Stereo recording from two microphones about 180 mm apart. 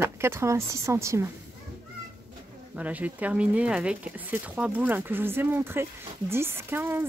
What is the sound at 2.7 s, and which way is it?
Speech, 10° right (ahead or behind).